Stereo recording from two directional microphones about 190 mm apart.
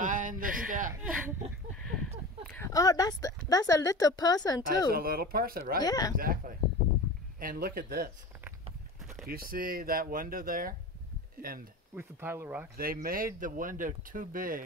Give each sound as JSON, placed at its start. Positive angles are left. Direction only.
{"t": 0.0, "sound": "a sound", "side_deg": -45}
{"t": 0.7, "sound": "chuckle", "side_deg": -45}
{"t": 1.8, "sound": "a sound", "side_deg": 5}
{"t": 2.5, "sound": "a woman's voice", "side_deg": 15}
{"t": 4.9, "sound": "speech", "side_deg": -50}
{"t": 5.8, "sound": "a woman's voice", "side_deg": 20}
{"t": 6.1, "sound": "speech", "side_deg": -50}
{"t": 9.0, "sound": "vehicle", "side_deg": -5}
{"t": 9.3, "sound": "speech", "side_deg": -50}
{"t": 11.9, "sound": "speech", "side_deg": -10}
{"t": 12.7, "sound": "speech", "side_deg": -50}